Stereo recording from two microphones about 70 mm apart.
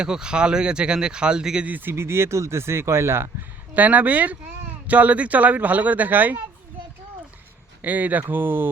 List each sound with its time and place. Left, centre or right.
0.0 s speech: centre
1.7 s speech: right
3.8 s speech: right
7.8 s speech: right